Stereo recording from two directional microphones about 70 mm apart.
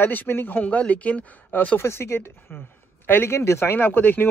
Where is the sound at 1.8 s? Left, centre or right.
Left.